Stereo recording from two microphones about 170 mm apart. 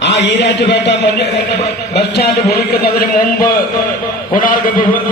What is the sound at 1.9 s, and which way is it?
A man's voice, 70° left (ahead or behind).